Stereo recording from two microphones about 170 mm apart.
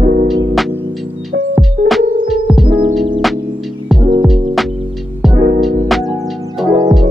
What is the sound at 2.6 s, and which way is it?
Music, 30° right (ahead or behind).